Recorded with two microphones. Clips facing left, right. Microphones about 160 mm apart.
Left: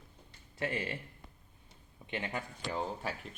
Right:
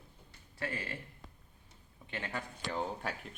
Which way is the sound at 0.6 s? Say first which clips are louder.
Left 4 dB; 20° left (ahead or behind).